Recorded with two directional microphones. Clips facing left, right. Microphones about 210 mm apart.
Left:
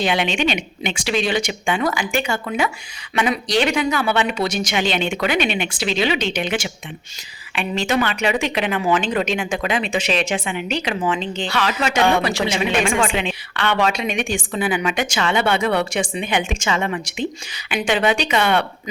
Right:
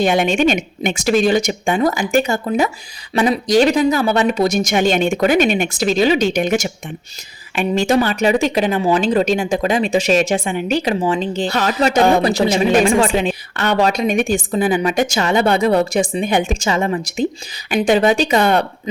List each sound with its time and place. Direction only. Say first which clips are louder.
0.0 s a woman's voice: right 6 dB; 45° right (ahead or behind)